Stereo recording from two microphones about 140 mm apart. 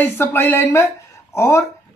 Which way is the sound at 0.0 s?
15° left (ahead or behind).